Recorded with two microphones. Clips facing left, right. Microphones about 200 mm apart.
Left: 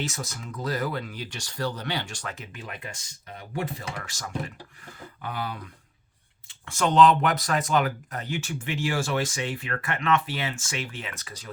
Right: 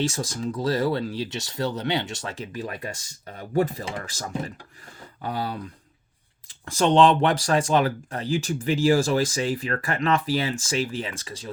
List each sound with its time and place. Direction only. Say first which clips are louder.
0.1 s speech: right 8 dB; 35° right (ahead or behind)
5.2 s speech: right 4 dB; 30° right (ahead or behind)